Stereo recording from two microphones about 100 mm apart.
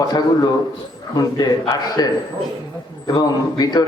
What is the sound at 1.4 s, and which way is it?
A man's voice, 40° left (ahead or behind).